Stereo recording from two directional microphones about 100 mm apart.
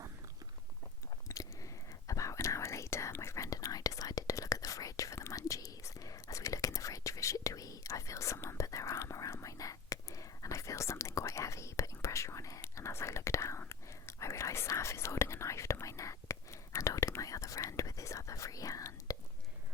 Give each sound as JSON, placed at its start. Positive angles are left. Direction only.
{"t": 1.3, "sound": "whispering", "side_deg": 35}